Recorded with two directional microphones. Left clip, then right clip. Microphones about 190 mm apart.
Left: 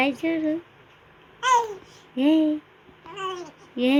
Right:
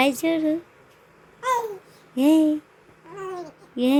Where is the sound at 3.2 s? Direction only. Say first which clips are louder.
Left 2 dB; 20° right (ahead or behind).